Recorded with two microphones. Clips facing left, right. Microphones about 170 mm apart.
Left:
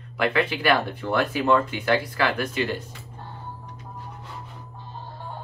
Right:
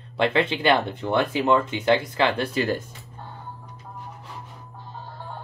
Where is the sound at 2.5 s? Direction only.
40° right (ahead or behind).